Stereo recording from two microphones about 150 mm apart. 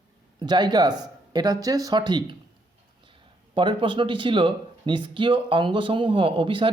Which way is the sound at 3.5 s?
35° right (ahead or behind).